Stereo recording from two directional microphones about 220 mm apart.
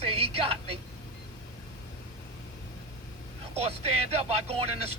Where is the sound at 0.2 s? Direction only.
25° right (ahead or behind).